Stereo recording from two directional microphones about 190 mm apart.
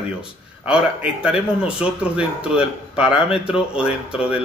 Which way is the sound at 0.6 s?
5° right (ahead or behind).